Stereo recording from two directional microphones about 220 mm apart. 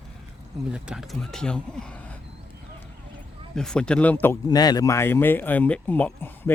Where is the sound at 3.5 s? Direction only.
5° left (ahead or behind).